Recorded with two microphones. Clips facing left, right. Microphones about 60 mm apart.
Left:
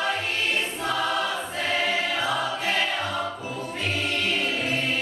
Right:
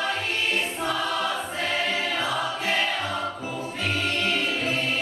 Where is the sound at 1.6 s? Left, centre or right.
Centre.